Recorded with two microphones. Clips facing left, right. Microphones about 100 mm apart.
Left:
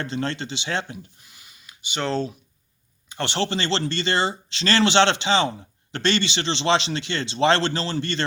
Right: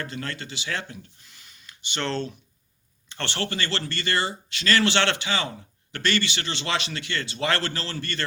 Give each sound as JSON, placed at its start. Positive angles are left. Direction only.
{"t": 0.0, "sound": "speech", "side_deg": 25}
{"t": 3.1, "sound": "speech", "side_deg": 15}